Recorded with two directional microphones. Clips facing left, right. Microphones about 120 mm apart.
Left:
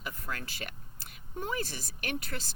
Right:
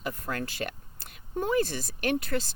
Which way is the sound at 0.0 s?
35° right (ahead or behind).